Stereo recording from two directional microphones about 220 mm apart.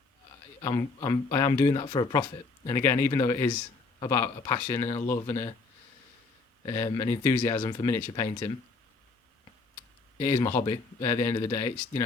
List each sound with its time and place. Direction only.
0.6 s speech: 15° left (ahead or behind)
6.7 s speech: 15° left (ahead or behind)
10.3 s speech: 15° left (ahead or behind)